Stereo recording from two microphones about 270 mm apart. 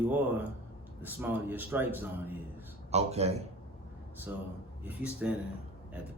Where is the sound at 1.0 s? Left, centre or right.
Centre.